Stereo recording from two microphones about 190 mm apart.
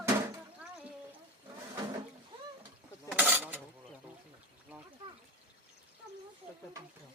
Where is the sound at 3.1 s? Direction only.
10° right (ahead or behind).